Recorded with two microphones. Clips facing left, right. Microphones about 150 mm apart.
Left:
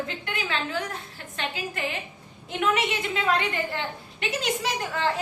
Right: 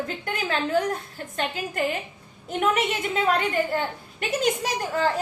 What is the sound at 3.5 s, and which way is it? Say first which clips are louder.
A woman's voice: right 5 dB; 45° right (ahead or behind).